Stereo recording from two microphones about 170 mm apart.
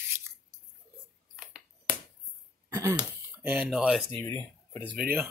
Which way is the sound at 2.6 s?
20° right (ahead or behind).